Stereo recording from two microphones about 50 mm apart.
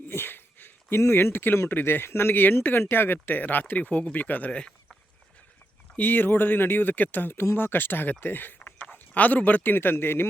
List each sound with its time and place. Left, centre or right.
0.1 s a sound: left
1.0 s speech: left
6.0 s speech: left